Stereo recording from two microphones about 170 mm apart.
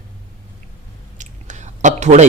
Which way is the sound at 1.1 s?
45° right (ahead or behind).